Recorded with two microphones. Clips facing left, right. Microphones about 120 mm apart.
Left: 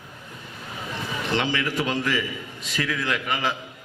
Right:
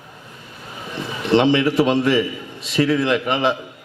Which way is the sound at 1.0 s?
20° right (ahead or behind).